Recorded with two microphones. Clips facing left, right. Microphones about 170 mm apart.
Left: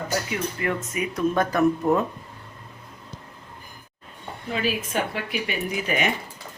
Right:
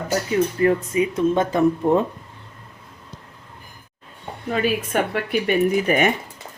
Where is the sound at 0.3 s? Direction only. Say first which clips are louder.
Right 9 dB; 35° right (ahead or behind).